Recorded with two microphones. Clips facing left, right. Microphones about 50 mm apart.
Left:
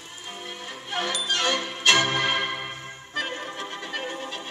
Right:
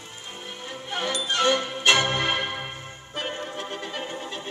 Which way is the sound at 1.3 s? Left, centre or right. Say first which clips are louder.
Right 5 dB; right.